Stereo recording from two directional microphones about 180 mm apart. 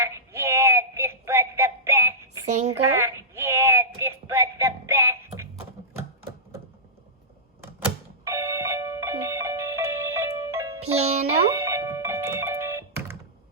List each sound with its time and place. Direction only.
0.0 s a sound: 15° right (ahead or behind)
8.2 s music: 15° right (ahead or behind)
10.8 s music: 35° right (ahead or behind)
11.5 s music: 15° right (ahead or behind)